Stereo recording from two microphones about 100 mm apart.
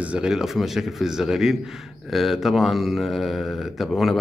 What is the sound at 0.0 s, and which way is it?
Speech, 10° right (ahead or behind).